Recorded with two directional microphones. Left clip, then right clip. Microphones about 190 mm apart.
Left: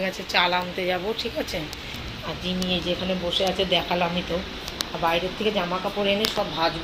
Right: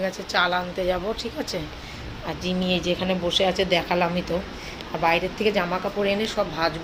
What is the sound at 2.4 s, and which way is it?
A woman's voice, 20° right (ahead or behind).